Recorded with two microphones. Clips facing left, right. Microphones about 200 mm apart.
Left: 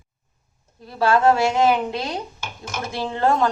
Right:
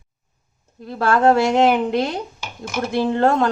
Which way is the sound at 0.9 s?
55° right (ahead or behind).